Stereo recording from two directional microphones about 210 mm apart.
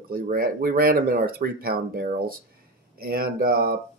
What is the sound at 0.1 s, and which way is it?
Speech, 45° right (ahead or behind).